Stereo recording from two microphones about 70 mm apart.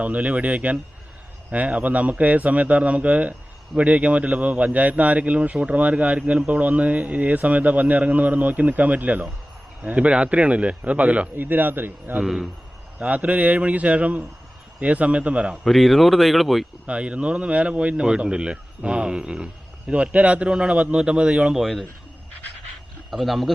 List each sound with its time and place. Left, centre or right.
0.0 s a man's voice: centre
12.2 s speech: centre
13.0 s a man's voice: centre
15.6 s speech: centre
16.8 s speech: centre
21.5 s speech: centre
23.1 s speech: centre